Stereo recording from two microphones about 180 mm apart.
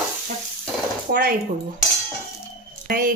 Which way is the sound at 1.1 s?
50° right (ahead or behind).